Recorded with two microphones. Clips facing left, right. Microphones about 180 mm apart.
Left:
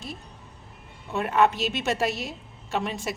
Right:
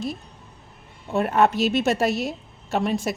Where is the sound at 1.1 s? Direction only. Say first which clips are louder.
Right 3 dB; 40° right (ahead or behind).